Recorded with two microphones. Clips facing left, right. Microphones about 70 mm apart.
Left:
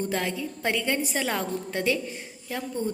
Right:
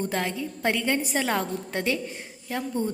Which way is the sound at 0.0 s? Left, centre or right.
Right.